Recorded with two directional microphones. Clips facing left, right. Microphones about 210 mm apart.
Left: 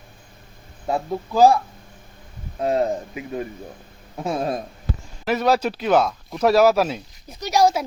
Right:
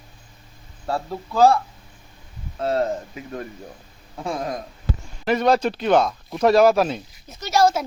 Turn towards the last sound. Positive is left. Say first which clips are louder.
# even
turn(degrees=15)  # may be behind; listen again after turning